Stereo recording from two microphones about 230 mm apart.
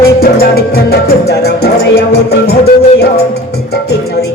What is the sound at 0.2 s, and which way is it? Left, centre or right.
Music, left.